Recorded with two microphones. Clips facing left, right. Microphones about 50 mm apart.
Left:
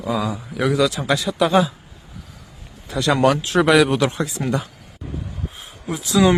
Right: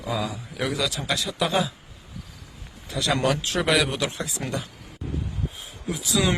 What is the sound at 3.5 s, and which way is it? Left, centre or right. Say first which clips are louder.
Speech: left 9 dB; centre.